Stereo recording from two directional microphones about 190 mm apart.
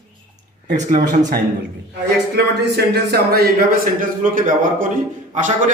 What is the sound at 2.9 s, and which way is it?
A man's voice, 55° right (ahead or behind).